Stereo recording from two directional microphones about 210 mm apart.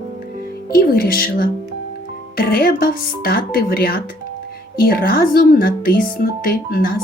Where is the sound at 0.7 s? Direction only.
45° left (ahead or behind).